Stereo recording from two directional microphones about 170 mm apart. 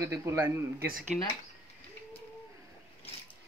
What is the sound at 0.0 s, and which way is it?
Speech, 15° right (ahead or behind).